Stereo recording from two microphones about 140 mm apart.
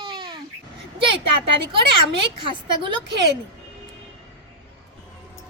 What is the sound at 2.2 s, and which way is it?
Speech, 35° right (ahead or behind).